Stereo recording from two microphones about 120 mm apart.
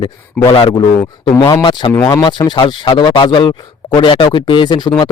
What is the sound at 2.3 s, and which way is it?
Speech, 40° left (ahead or behind).